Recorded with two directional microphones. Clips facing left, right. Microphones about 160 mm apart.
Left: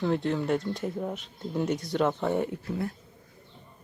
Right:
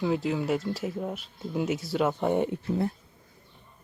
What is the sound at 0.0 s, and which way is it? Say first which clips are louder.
Speech: even; 5° right (ahead or behind).